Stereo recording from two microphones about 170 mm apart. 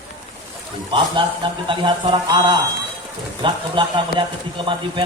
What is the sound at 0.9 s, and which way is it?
A man's voice, 30° right (ahead or behind).